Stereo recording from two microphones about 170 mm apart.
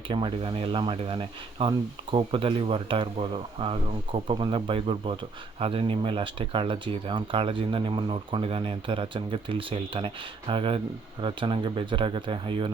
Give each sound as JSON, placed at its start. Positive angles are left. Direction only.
{"t": 0.1, "sound": "speech", "side_deg": -30}